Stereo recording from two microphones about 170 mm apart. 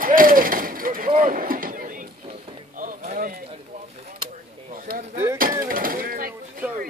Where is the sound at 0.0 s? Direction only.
55° right (ahead or behind).